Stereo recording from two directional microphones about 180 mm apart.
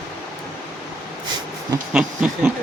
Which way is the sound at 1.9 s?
5° right (ahead or behind).